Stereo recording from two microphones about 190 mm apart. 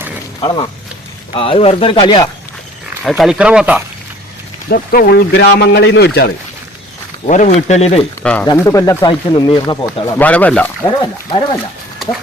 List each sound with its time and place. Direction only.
0.4 s speech: 25° left (ahead or behind)
3.0 s speech: centre (ahead or behind)
4.7 s speech: 55° left (ahead or behind)
7.3 s speech: 40° left (ahead or behind)
8.2 s speech: 5° left (ahead or behind)
8.4 s speech: 15° left (ahead or behind)
11.0 s speech: 25° left (ahead or behind)